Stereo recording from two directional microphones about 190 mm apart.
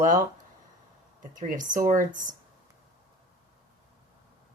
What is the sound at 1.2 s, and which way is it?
Speech, 45° right (ahead or behind).